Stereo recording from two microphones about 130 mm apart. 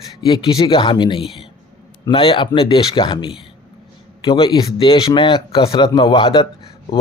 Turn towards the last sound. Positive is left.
turn(degrees=40)  # may be behind; listen again after turning